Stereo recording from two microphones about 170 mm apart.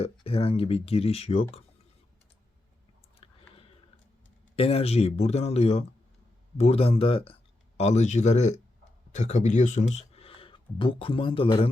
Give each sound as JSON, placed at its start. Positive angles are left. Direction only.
{"t": 0.0, "sound": "speech", "side_deg": 35}
{"t": 3.2, "sound": "clicking", "side_deg": 35}
{"t": 4.5, "sound": "speech", "side_deg": 35}